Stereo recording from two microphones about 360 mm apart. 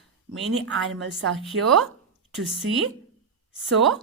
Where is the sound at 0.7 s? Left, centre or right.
Right.